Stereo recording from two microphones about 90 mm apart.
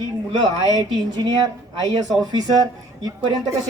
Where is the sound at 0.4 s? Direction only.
50° right (ahead or behind).